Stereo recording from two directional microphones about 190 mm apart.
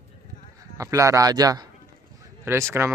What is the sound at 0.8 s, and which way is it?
A man's voice, 15° right (ahead or behind).